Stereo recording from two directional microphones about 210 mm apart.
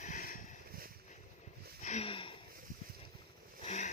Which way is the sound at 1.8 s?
35° left (ahead or behind).